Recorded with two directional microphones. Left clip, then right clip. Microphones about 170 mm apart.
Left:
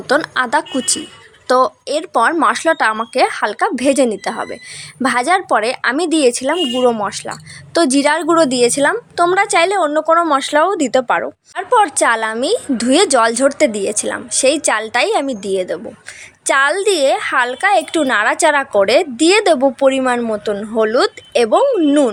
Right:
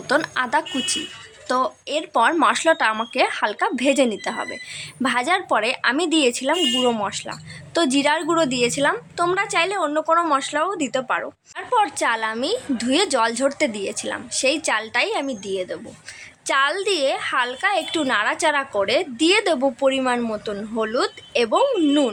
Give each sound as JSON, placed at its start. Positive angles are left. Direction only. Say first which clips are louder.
{"t": 0.1, "sound": "a woman's voice", "louder": "left 5 dB", "side_deg": 30}
{"t": 10.3, "sound": "a woman's voice", "louder": "left 8 dB", "side_deg": 45}